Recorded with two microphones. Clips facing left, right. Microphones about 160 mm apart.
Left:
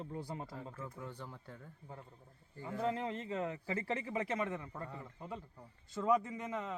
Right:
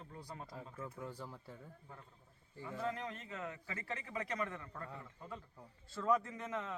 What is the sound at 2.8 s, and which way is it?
A man's voice, 25° left (ahead or behind).